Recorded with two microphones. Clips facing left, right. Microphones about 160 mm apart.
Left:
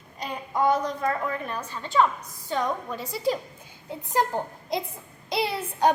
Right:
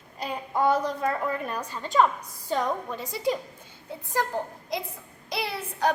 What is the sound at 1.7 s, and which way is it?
Speech, 40° right (ahead or behind).